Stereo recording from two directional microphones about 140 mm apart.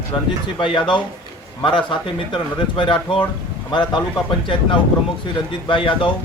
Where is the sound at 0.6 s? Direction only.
35° left (ahead or behind).